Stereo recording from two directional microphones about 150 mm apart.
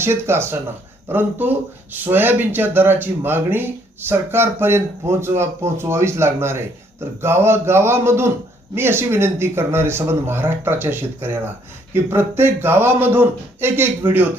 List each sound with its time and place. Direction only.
0.0 s speech: 15° right (ahead or behind)